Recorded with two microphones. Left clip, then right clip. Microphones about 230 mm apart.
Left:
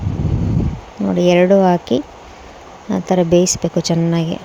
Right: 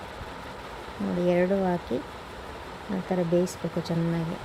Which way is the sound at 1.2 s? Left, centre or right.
Left.